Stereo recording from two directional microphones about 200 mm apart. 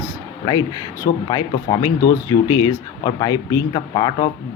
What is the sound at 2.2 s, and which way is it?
Speech, 20° left (ahead or behind).